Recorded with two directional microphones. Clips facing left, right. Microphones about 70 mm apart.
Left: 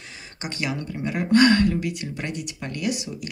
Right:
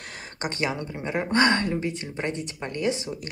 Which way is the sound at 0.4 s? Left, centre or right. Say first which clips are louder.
Right 1 dB; right.